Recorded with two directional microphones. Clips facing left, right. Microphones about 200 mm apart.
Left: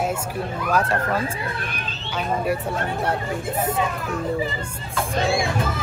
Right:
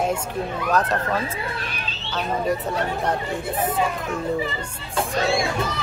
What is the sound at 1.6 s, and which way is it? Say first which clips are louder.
Speech: left 1 dB; 50° left (ahead or behind).